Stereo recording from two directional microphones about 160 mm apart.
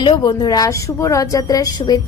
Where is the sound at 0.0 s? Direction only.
25° left (ahead or behind).